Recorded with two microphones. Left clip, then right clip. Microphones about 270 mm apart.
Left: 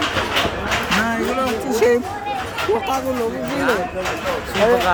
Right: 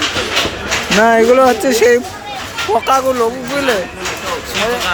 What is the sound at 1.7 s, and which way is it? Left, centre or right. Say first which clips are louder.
Speech: right 6 dB; centre.